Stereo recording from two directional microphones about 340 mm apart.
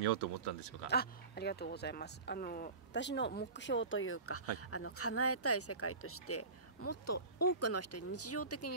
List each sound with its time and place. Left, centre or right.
0.8 s speech: left